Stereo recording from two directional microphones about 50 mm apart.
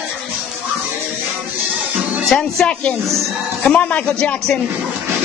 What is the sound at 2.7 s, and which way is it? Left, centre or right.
Speech, left.